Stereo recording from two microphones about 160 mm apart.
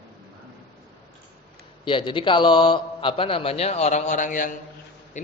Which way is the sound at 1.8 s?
30° left (ahead or behind).